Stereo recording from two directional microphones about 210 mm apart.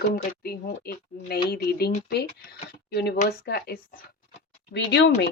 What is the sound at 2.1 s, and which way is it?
Speech, 50° left (ahead or behind).